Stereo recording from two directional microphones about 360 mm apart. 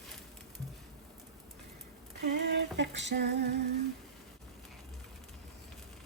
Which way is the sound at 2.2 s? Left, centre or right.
Right.